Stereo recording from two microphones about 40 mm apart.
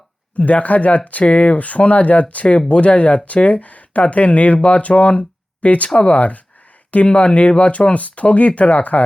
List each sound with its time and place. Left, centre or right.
0.3 s speech: left